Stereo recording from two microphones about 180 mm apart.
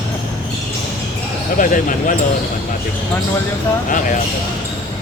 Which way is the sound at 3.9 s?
45° left (ahead or behind).